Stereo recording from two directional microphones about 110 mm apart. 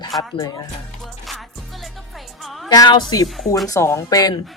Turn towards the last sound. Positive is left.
turn(degrees=35)  # may be behind; listen again after turning